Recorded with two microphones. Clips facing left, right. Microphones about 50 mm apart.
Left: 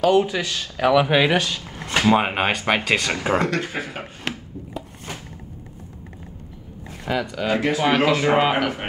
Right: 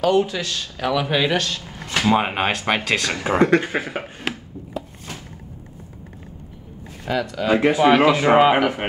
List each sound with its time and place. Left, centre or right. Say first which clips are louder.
0.1 s speech: left 1 dB; centre
3.3 s speech: right 5 dB; right
4.0 s chopping: right 2 dB; centre
7.1 s speech: right 1 dB; centre
7.4 s speech: right 5 dB; centre